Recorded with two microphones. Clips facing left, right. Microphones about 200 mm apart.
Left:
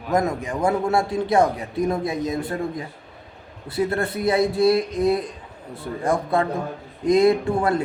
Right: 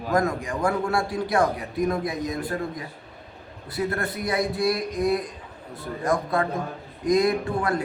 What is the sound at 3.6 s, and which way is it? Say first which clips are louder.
Mantra: left 4 dB; 25° left (ahead or behind).